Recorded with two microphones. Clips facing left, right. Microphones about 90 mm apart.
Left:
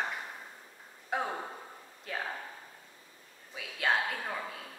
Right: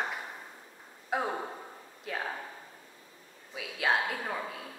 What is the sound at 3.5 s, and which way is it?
A woman's voice, centre (ahead or behind).